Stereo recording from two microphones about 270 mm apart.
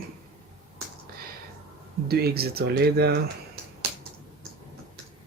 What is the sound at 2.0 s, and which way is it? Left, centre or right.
Speech, right.